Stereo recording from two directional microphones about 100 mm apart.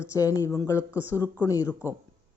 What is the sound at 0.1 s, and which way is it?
Speech, 35° left (ahead or behind).